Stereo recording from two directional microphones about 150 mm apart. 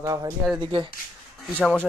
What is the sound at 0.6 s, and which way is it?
Speech, 35° right (ahead or behind).